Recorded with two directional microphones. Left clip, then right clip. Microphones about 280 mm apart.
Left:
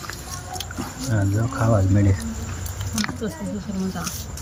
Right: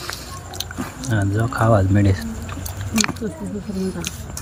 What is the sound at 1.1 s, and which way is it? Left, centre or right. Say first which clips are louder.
Speech: right 5 dB; centre.